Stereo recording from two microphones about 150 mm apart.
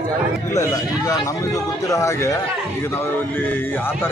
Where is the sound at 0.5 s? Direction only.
20° left (ahead or behind).